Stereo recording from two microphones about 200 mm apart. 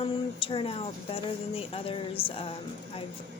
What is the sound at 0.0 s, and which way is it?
Speech, 25° left (ahead or behind).